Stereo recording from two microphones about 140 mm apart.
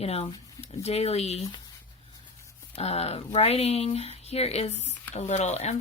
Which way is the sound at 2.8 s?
45° left (ahead or behind).